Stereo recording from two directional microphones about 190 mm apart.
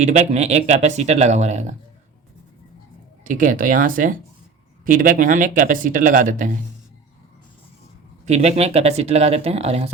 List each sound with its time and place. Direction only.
0.0 s speech: 35° right (ahead or behind)
3.2 s speech: 45° right (ahead or behind)
8.2 s speech: 35° right (ahead or behind)